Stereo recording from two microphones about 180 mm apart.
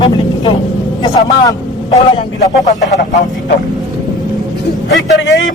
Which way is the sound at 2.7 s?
40° left (ahead or behind).